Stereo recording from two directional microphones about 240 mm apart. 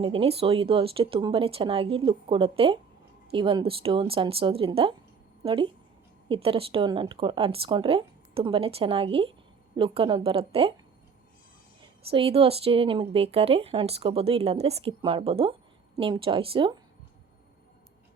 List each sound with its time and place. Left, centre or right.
0.0 s speech: right
11.8 s speech: right